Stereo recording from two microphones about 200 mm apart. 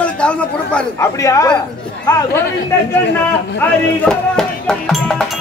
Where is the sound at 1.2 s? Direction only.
15° left (ahead or behind).